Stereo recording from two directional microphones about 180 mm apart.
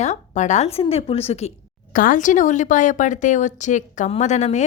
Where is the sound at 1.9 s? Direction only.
45° left (ahead or behind).